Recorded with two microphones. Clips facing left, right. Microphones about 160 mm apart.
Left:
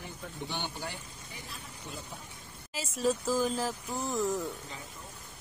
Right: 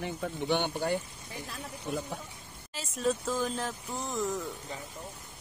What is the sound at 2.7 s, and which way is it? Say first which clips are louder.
Speech: even; 5° left (ahead or behind).